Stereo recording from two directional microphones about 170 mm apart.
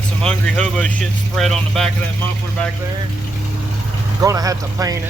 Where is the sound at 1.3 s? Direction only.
Centre (ahead or behind).